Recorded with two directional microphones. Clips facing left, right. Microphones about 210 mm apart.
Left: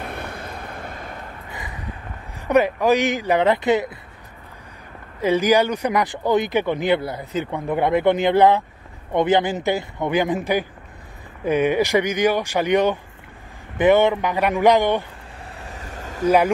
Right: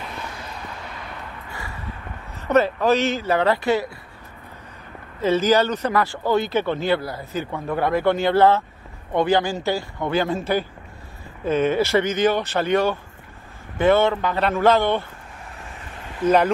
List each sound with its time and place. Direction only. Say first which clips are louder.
0.0 s vehicle: left 3 dB; 55° left (ahead or behind)
1.5 s a sound: left 1 dB; 20° left (ahead or behind)
2.3 s speech: left 1 dB; 15° left (ahead or behind)
5.2 s speech: left 1 dB; 15° left (ahead or behind)
15.5 s vehicle: left 5 dB; 40° left (ahead or behind)